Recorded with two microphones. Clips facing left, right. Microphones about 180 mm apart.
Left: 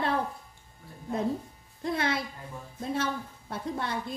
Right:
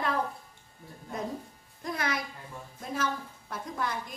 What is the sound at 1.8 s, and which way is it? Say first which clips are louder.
A woman's voice: left 4 dB; 30° left (ahead or behind).